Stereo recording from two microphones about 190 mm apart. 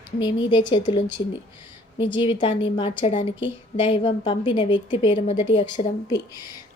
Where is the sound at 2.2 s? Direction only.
25° left (ahead or behind).